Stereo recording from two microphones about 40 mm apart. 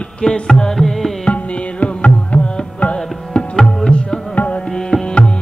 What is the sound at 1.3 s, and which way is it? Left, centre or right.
Music, left.